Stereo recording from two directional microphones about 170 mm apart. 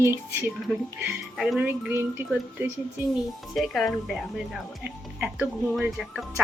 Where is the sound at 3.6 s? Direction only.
Centre (ahead or behind).